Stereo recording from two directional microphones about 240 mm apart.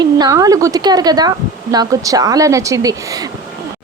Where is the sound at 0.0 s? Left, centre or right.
Centre.